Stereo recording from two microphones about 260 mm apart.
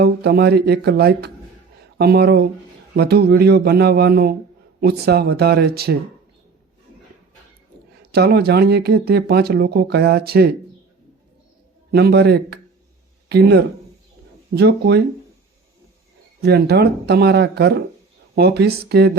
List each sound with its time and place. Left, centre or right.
0.0 s speech: right
8.1 s speech: right
11.9 s speech: right
16.4 s speech: right